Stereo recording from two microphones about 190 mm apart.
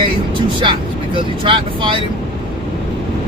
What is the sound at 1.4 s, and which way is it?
Speech, 25° right (ahead or behind).